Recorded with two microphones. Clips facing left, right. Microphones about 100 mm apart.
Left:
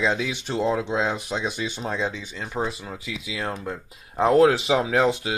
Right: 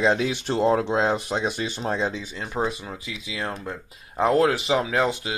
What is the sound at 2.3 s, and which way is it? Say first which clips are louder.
Speech: right 1 dB; 5° right (ahead or behind).